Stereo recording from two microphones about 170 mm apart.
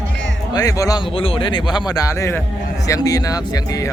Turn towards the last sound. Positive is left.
turn(degrees=20)  # may be behind; listen again after turning